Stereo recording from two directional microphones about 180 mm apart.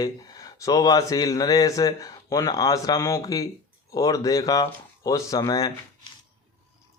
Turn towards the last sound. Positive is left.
turn(degrees=20)  # may be behind; listen again after turning